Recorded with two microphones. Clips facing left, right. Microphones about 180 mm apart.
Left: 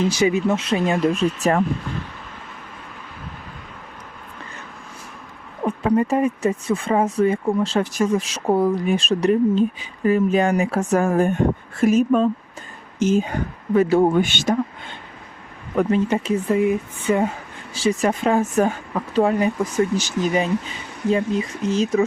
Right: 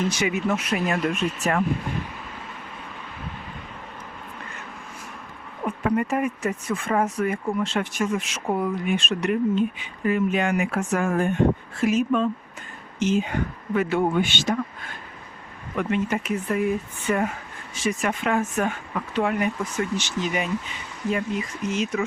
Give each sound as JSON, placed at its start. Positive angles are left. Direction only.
{"t": 0.1, "sound": "speech", "side_deg": 30}
{"t": 5.6, "sound": "speech", "side_deg": 30}
{"t": 15.7, "sound": "speech", "side_deg": 35}